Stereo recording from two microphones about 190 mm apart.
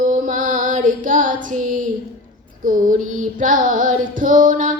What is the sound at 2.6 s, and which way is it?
Music, 45° right (ahead or behind).